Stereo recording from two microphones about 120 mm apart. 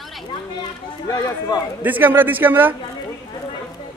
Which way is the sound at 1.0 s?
30° left (ahead or behind).